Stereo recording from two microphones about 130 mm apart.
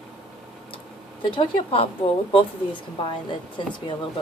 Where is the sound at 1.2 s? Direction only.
40° left (ahead or behind).